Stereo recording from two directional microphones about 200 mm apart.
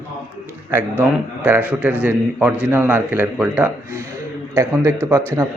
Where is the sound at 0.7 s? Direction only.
10° right (ahead or behind).